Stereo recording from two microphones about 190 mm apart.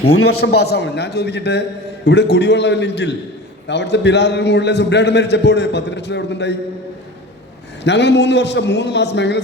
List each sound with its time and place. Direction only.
0.0 s a man's voice: 60° left (ahead or behind)
7.9 s a man's voice: 65° left (ahead or behind)